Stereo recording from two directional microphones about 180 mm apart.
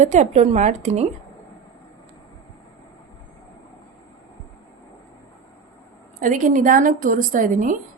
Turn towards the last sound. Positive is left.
turn(degrees=-45)  # may be behind; listen again after turning